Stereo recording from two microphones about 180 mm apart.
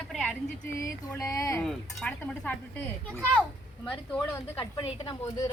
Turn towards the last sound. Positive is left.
turn(degrees=20)  # may be behind; listen again after turning